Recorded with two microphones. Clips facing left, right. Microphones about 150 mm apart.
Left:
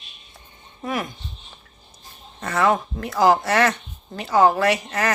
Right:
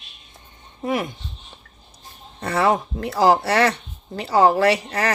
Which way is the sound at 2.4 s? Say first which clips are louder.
Right 1 dB; 35° right (ahead or behind).